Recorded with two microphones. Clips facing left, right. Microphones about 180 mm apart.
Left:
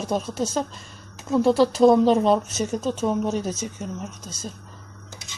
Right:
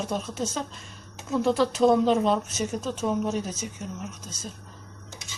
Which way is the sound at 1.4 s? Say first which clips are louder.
Left 4 dB; 35° left (ahead or behind).